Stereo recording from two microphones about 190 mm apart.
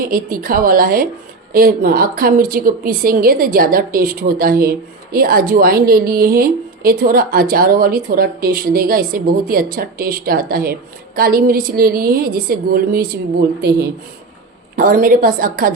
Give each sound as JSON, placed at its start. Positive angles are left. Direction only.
{"t": 0.0, "sound": "a woman's voice", "side_deg": -50}